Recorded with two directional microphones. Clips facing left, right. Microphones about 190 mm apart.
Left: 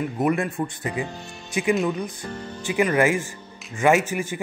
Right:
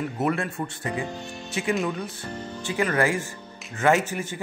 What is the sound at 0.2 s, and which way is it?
Speech, 15° left (ahead or behind).